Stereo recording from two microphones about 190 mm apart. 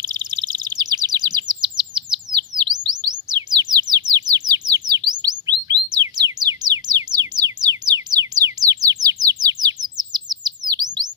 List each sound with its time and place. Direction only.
0.0 s chirp: 20° right (ahead or behind)
5.7 s music: 20° right (ahead or behind)
9.4 s chirp: 20° right (ahead or behind)